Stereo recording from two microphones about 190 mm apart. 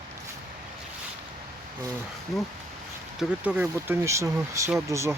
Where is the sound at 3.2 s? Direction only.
5° right (ahead or behind).